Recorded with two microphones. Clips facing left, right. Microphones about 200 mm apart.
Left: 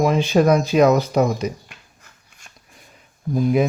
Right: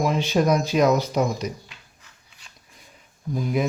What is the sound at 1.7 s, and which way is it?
Dog, 50° left (ahead or behind).